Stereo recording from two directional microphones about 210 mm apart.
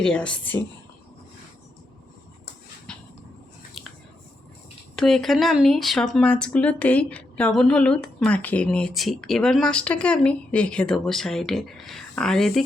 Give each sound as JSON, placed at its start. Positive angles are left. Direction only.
{"t": 0.0, "sound": "speech", "side_deg": 5}
{"t": 3.8, "sound": "finger snapping", "side_deg": 0}
{"t": 4.9, "sound": "speech", "side_deg": 0}